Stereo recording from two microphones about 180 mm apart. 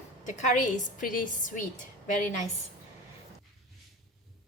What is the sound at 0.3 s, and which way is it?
A woman's voice, 45° left (ahead or behind).